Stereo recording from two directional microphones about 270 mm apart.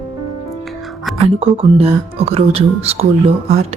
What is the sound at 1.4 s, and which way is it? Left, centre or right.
A woman's voice, right.